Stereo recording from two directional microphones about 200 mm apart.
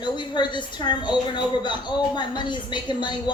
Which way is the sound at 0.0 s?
20° left (ahead or behind).